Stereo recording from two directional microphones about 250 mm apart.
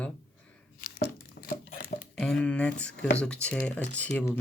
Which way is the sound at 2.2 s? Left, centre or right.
Centre.